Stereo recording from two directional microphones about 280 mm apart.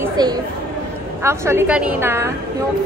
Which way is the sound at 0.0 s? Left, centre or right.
Centre.